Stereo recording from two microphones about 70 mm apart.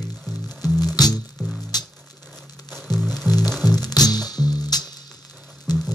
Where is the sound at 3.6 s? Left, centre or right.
Left.